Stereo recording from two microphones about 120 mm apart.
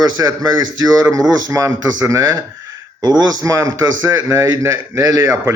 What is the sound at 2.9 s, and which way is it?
A man's voice, 30° right (ahead or behind).